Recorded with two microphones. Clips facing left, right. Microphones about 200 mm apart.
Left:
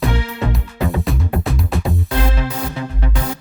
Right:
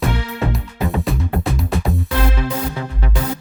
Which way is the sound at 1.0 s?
Centre (ahead or behind).